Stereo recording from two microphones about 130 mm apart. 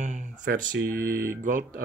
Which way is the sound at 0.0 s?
70° right (ahead or behind).